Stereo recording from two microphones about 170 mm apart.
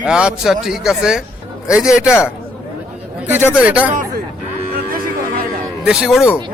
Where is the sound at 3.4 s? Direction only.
15° left (ahead or behind).